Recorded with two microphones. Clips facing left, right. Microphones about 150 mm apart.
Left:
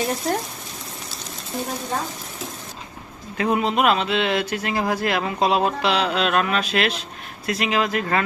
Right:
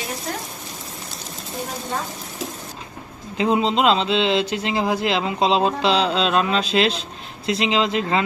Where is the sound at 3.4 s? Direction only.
20° right (ahead or behind).